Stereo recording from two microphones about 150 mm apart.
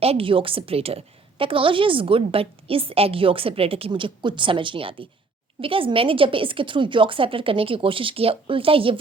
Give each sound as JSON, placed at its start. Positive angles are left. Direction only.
{"t": 0.0, "sound": "a woman's voice", "side_deg": -40}